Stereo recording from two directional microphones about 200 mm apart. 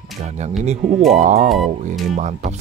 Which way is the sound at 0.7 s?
35° right (ahead or behind).